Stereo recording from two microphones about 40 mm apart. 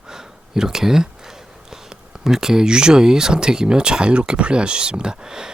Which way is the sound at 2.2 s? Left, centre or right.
Centre.